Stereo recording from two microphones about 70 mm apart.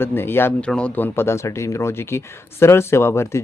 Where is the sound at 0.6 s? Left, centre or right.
Centre.